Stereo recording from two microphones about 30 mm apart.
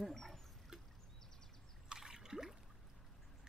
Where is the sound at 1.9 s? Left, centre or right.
Centre.